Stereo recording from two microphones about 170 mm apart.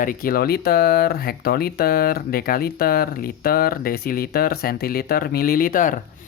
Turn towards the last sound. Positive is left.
turn(degrees=55)  # may be behind; listen again after turning